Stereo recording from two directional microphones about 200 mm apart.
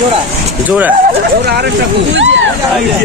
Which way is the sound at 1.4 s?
55° right (ahead or behind).